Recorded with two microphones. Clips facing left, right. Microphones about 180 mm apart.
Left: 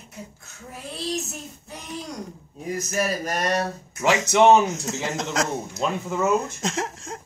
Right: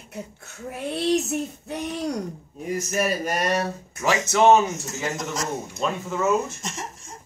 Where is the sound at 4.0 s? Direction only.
15° left (ahead or behind).